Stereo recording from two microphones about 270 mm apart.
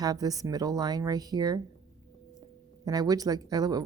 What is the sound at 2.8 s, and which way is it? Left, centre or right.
Speech, centre.